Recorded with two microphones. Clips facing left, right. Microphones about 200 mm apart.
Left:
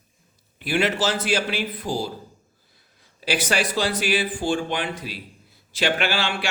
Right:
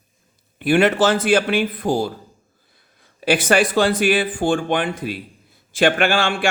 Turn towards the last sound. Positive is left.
turn(degrees=-50)  # may be behind; listen again after turning